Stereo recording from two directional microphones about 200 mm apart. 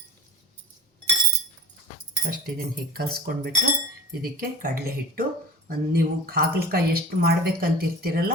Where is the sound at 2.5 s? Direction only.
50° right (ahead or behind).